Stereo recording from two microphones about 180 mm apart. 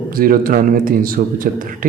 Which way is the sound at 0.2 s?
50° right (ahead or behind).